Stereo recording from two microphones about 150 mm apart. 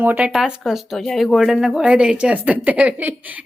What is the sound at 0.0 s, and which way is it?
Speech, 10° right (ahead or behind).